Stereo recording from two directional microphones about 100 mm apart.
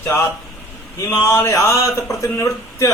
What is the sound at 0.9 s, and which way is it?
A man's voice, 30° left (ahead or behind).